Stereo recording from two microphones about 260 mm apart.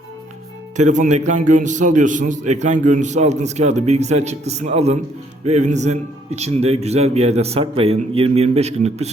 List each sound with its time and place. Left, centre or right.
0.8 s a man's voice: right